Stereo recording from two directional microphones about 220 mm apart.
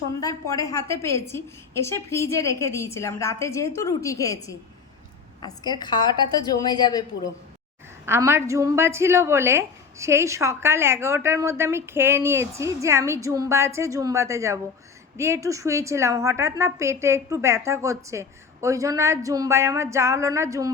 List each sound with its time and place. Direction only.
0.2 s a woman's voice: 15° left (ahead or behind)
8.0 s a woman's voice: 10° right (ahead or behind)